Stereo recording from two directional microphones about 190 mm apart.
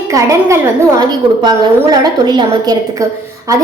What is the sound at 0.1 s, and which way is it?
A woman's voice, 15° right (ahead or behind).